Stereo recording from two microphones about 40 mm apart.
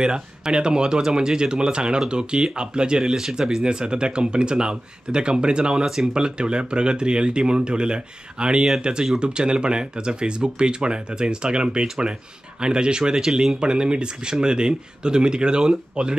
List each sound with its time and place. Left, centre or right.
0.0 s speech: right